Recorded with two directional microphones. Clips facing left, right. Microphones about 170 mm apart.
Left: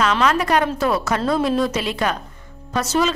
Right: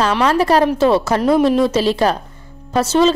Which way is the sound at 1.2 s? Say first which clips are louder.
Right 6 dB; 15° right (ahead or behind).